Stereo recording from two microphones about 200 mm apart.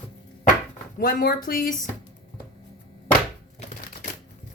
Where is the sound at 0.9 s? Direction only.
45° left (ahead or behind).